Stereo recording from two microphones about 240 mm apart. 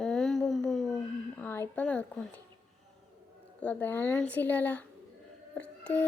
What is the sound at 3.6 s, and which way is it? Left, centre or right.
A woman's voice, centre.